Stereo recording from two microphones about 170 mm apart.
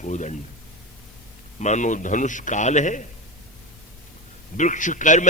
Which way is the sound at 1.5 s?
45° left (ahead or behind).